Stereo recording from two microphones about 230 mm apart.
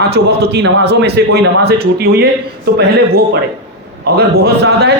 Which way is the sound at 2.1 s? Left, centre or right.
Right.